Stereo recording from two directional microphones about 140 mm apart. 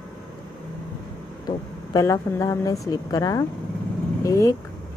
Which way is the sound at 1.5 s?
25° left (ahead or behind).